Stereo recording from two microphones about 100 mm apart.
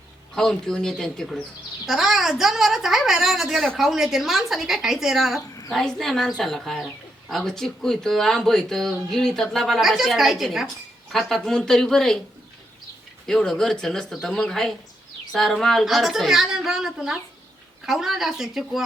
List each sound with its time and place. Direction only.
0.3 s a woman's voice: 5° left (ahead or behind)
5.4 s a sound: 30° left (ahead or behind)
5.7 s a woman's voice: 5° left (ahead or behind)
13.2 s a woman's voice: 5° left (ahead or behind)